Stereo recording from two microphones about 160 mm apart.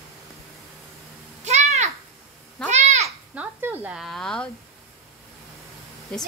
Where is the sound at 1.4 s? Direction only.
45° right (ahead or behind).